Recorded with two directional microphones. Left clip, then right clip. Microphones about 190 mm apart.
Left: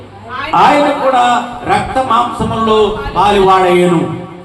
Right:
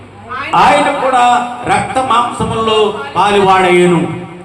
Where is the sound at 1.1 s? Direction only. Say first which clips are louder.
Right 1 dB; 30° right (ahead or behind).